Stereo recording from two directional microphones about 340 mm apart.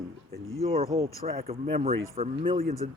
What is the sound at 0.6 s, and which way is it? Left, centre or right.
Speech, centre.